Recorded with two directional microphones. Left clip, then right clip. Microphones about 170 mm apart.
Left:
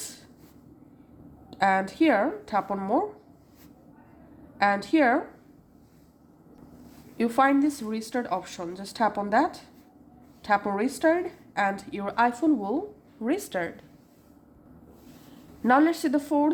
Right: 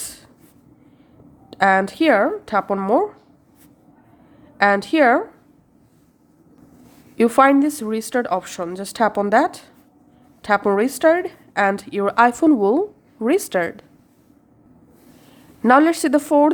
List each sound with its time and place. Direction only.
0.0 s a sound: 35° right (ahead or behind)
1.5 s speech: 40° right (ahead or behind)
4.5 s speech: 35° right (ahead or behind)
7.2 s a woman's voice: 45° right (ahead or behind)
15.6 s speech: 35° right (ahead or behind)